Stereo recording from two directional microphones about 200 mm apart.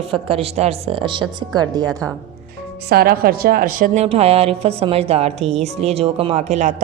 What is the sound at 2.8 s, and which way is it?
A woman's voice, 50° right (ahead or behind).